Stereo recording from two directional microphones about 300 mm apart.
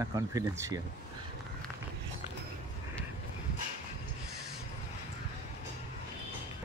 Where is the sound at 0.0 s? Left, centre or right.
Centre.